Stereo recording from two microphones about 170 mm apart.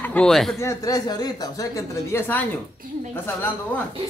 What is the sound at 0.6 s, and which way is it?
A woman's voice, 20° left (ahead or behind).